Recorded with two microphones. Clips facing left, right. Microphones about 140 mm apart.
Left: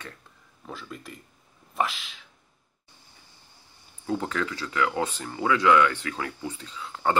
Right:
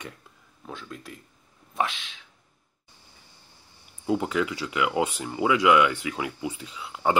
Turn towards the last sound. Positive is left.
turn(degrees=-10)  # may be behind; listen again after turning